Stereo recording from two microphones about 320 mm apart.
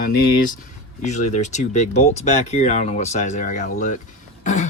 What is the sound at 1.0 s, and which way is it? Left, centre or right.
Speech, left.